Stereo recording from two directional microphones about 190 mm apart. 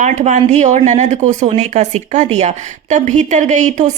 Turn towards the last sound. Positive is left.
turn(degrees=-40)  # may be behind; listen again after turning